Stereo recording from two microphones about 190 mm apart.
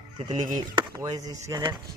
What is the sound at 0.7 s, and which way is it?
Speech, 20° right (ahead or behind).